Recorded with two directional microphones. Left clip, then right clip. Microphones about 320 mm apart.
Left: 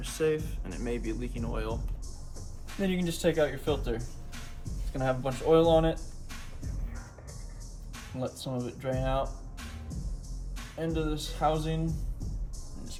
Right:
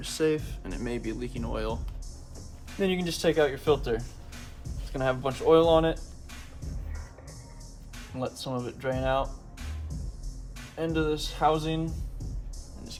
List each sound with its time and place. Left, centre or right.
0.0 s speech: right
2.8 s speech: centre
8.2 s speech: centre
10.8 s speech: centre